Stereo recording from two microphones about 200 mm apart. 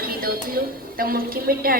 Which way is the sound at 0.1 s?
45° right (ahead or behind).